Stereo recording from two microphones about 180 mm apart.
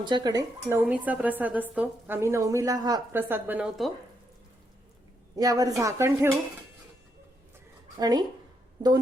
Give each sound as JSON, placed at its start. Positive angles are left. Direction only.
{"t": 0.0, "sound": "speech", "side_deg": -25}
{"t": 0.9, "sound": "a woman's voice", "side_deg": -5}
{"t": 5.4, "sound": "speech", "side_deg": -20}
{"t": 7.9, "sound": "speech", "side_deg": -20}